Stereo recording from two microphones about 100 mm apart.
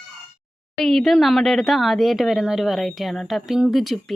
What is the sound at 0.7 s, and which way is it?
Speech, 5° left (ahead or behind).